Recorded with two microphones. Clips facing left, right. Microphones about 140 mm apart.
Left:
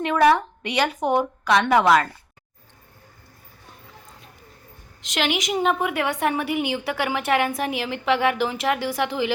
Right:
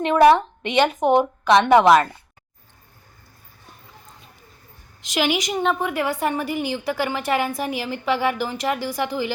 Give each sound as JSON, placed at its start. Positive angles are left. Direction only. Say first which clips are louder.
{"t": 0.0, "sound": "a woman's voice", "louder": "right 4 dB", "side_deg": -20}
{"t": 5.0, "sound": "a woman's voice", "louder": "right 2 dB", "side_deg": -5}